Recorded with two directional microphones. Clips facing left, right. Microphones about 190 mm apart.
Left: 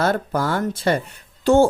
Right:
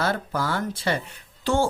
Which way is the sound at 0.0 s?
50° left (ahead or behind).